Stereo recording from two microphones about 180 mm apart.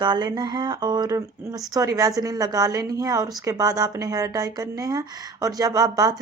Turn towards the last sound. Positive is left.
turn(degrees=-20)  # may be behind; listen again after turning